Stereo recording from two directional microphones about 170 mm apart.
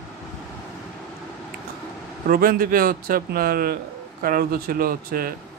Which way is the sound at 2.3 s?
60° right (ahead or behind).